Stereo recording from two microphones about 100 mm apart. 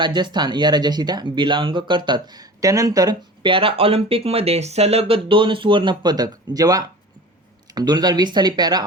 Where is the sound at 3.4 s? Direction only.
65° right (ahead or behind).